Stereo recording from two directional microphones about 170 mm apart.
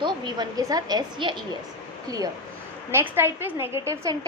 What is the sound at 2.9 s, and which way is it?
A woman's voice, 15° right (ahead or behind).